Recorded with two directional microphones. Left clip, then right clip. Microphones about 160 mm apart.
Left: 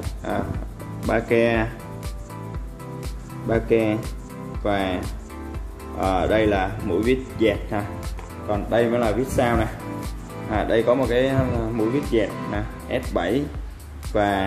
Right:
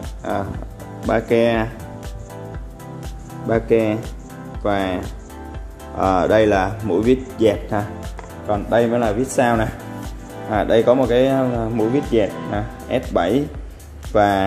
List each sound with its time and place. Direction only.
1.1 s speech: 30° right (ahead or behind)
3.4 s speech: 25° right (ahead or behind)